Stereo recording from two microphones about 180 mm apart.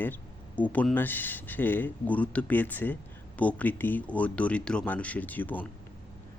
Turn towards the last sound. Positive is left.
turn(degrees=10)  # may be behind; listen again after turning